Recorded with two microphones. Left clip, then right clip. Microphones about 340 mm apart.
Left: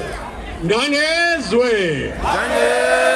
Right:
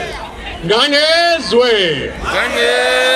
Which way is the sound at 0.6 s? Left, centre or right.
Right.